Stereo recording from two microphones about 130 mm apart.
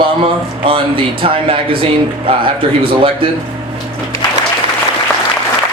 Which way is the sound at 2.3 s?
45° right (ahead or behind).